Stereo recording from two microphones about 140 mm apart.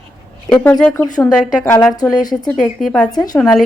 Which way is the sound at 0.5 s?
5° left (ahead or behind).